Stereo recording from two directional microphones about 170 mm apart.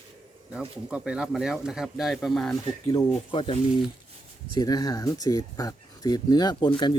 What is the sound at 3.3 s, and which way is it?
Speech, 30° left (ahead or behind).